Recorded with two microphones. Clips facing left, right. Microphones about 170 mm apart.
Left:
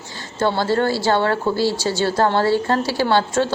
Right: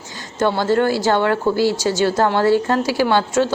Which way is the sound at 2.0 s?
15° right (ahead or behind).